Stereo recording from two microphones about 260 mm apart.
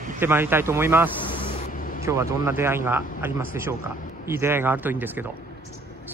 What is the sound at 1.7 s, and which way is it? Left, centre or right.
Vehicle, left.